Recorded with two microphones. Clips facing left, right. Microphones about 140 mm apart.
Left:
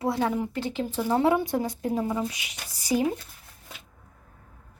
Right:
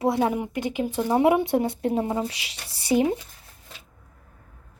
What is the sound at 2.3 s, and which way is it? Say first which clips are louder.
Speech: even; 80° right.